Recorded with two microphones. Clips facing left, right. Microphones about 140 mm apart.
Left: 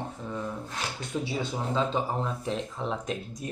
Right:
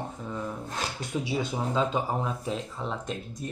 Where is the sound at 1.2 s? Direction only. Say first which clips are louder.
Right 3 dB; 10° right (ahead or behind).